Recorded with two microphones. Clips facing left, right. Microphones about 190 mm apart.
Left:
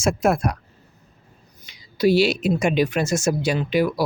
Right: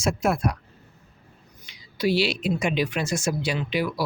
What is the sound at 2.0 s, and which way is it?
Speech, 45° left (ahead or behind).